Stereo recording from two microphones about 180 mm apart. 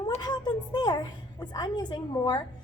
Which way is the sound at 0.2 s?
25° left (ahead or behind).